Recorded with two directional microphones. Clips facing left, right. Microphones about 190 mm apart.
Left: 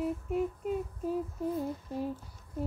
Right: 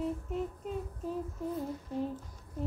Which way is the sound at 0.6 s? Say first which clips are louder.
Left 5 dB; 10° left (ahead or behind).